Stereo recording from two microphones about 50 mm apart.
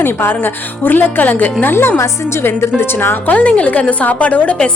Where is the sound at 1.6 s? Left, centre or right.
Left.